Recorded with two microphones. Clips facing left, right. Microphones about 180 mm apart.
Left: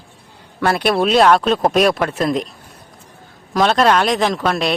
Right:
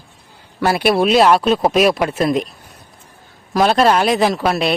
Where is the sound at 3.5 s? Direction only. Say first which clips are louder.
Right 1 dB; 5° right (ahead or behind).